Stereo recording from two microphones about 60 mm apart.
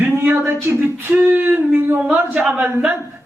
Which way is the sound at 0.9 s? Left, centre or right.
Right.